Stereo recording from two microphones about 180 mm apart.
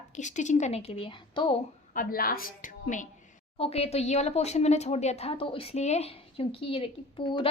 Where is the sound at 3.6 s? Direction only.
35° left (ahead or behind).